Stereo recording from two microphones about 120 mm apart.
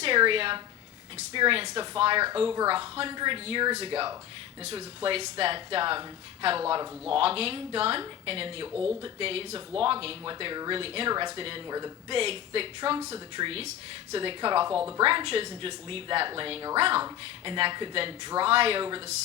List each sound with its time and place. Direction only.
0.2 s speech: 50° right (ahead or behind)
8.7 s speech: 10° right (ahead or behind)
9.1 s speech: 50° right (ahead or behind)
11.1 s speech: 40° right (ahead or behind)